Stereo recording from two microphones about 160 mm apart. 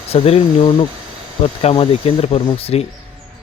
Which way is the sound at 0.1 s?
40° left (ahead or behind).